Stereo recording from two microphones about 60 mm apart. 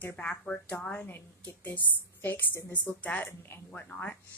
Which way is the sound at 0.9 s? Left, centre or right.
Left.